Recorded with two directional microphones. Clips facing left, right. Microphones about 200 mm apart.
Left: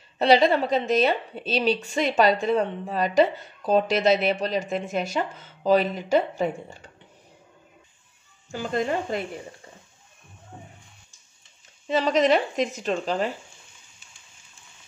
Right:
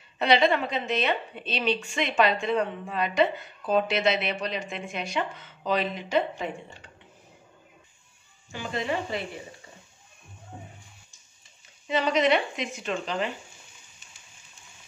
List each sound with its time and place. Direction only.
0.2 s a woman's voice: 35° left (ahead or behind)
8.5 s speech: 45° left (ahead or behind)
10.5 s music: 10° right (ahead or behind)
12.2 s a woman's voice: 40° left (ahead or behind)